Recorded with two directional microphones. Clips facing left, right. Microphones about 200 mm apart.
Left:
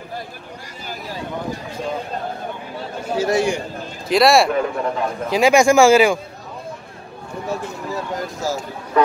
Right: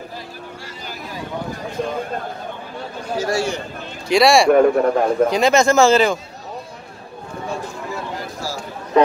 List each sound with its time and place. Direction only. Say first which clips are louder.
3.2 s speech: left 3 dB; 20° left (ahead or behind)
4.1 s speech: even; centre (ahead or behind)
4.5 s a man's voice: right 8 dB; 50° right (ahead or behind)
5.3 s speech: left 1 dB; 10° left (ahead or behind)
9.0 s speech: right 3 dB; 20° right (ahead or behind)